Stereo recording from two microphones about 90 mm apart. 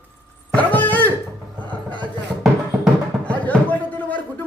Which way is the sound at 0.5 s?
20° left (ahead or behind).